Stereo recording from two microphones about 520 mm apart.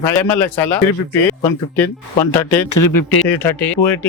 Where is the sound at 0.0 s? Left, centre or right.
Centre.